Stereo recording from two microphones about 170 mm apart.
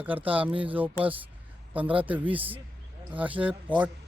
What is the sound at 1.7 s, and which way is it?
Speech, 10° right (ahead or behind).